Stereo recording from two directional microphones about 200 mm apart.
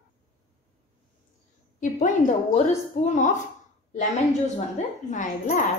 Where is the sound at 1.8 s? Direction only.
40° left (ahead or behind).